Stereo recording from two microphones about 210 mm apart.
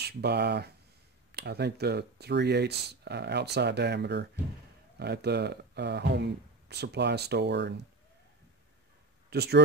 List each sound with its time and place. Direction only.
0.0 s speech: 50° right (ahead or behind)
9.3 s speech: 50° right (ahead or behind)